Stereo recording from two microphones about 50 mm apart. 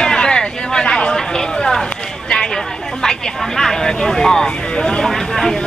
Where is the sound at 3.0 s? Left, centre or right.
Centre.